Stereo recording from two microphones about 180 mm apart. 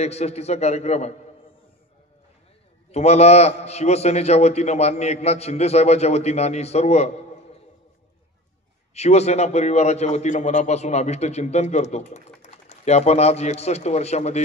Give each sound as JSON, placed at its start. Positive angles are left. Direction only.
{"t": 0.0, "sound": "a man's voice", "side_deg": 35}
{"t": 2.9, "sound": "a man's voice", "side_deg": 35}
{"t": 8.9, "sound": "a man's voice", "side_deg": 35}